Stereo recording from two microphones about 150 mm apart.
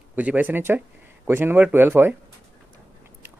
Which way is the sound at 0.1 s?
10° right (ahead or behind).